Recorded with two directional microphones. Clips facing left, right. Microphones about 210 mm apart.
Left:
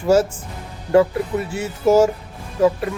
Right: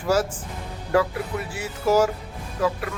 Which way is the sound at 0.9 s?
25° left (ahead or behind).